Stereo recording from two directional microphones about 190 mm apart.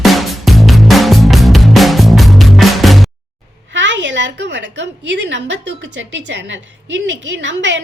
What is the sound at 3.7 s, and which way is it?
A woman's voice, 75° right (ahead or behind).